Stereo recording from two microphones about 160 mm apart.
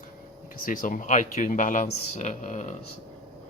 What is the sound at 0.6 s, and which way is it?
Speech, 60° left (ahead or behind).